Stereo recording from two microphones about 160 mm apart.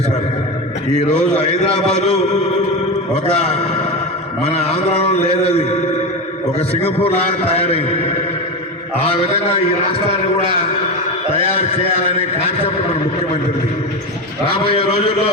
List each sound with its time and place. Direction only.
2.0 s a sound: 45° left (ahead or behind)
3.2 s a man's voice: 40° left (ahead or behind)
11.6 s a man's voice: 40° left (ahead or behind)